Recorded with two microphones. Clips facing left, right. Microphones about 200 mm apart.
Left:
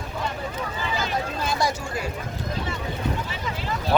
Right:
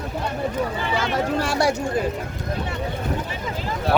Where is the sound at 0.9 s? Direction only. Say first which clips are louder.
Right 6 dB; 75° right (ahead or behind).